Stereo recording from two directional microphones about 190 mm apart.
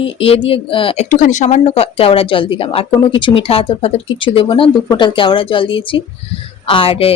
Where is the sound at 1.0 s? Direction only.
40° left (ahead or behind).